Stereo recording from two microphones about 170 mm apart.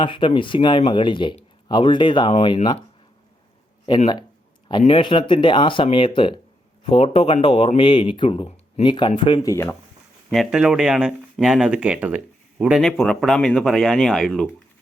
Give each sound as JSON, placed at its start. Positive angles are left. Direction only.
{"t": 0.0, "sound": "speech", "side_deg": 30}
{"t": 3.9, "sound": "speech", "side_deg": 25}
{"t": 10.3, "sound": "speech", "side_deg": -5}